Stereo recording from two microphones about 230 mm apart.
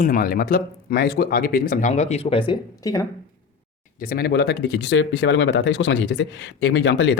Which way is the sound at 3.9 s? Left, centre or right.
Left.